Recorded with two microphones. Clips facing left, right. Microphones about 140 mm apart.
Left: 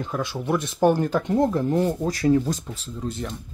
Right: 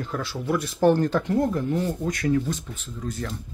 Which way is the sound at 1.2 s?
25° left (ahead or behind).